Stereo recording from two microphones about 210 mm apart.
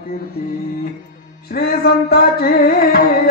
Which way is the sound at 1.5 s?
45° left (ahead or behind).